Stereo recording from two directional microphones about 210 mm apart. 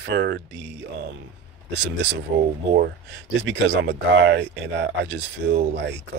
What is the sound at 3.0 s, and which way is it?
Speech, 55° right (ahead or behind).